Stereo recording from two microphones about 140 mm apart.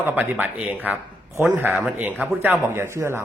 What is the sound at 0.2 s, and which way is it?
A man's voice, 10° right (ahead or behind).